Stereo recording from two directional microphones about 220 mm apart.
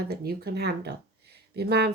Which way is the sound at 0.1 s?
45° right (ahead or behind).